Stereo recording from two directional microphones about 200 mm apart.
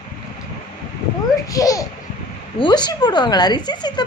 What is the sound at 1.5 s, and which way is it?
A woman's voice, 15° left (ahead or behind).